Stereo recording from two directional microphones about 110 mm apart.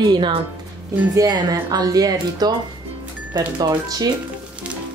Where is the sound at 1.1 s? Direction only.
35° right (ahead or behind).